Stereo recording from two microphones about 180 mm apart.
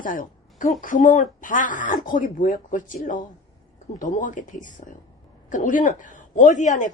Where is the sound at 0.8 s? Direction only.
45° left (ahead or behind).